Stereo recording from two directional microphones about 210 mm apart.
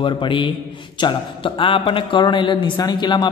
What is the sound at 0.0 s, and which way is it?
A man's voice, 25° left (ahead or behind).